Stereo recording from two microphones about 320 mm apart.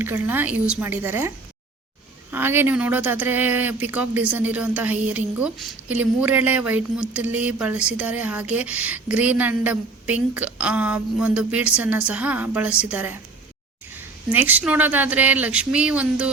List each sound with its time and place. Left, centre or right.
0.0 s a woman's voice: centre
2.3 s a woman's voice: centre